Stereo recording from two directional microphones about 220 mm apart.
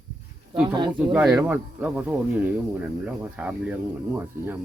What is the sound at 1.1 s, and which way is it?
Speech, 5° right (ahead or behind).